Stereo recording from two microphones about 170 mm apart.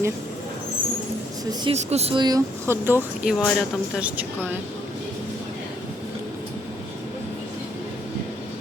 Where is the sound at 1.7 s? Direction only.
40° right (ahead or behind).